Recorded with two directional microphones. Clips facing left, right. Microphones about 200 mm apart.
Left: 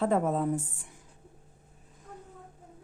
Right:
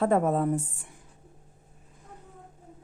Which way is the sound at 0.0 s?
55° right (ahead or behind).